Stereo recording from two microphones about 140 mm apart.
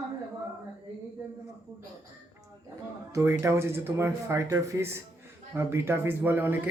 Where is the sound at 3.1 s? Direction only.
20° right (ahead or behind).